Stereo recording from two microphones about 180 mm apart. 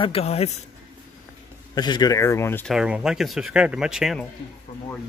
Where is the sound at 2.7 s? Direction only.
5° right (ahead or behind).